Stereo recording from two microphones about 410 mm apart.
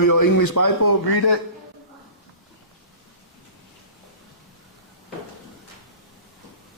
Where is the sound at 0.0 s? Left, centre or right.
Left.